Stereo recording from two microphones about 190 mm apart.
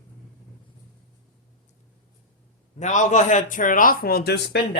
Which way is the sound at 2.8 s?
40° left (ahead or behind).